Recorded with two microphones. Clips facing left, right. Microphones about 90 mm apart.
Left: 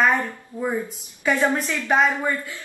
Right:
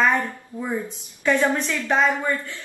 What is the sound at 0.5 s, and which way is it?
Speech, 20° left (ahead or behind).